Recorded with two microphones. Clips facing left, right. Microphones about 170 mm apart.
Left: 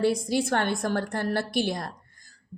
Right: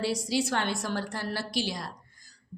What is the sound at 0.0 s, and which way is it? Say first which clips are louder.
A woman's voice: left 4 dB; 55° left (ahead or behind).